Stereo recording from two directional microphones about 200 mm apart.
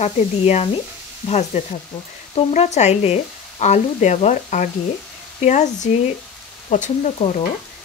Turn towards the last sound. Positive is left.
turn(degrees=35)  # may be behind; listen again after turning